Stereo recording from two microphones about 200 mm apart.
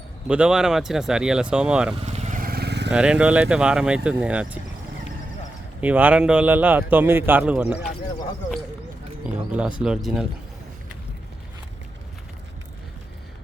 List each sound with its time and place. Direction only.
0.3 s speech: 5° right (ahead or behind)
2.0 s vehicle: 35° right (ahead or behind); by 2.9 s 55° right (ahead or behind)
2.9 s speech: 5° right (ahead or behind)
5.8 s speech: 10° right (ahead or behind)
9.5 s speech: 5° right (ahead or behind)